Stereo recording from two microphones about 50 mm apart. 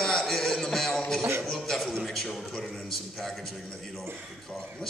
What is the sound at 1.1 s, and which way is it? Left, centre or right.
Speech, right.